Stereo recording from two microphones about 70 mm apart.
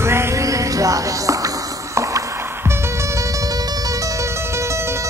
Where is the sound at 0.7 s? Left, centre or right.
Right.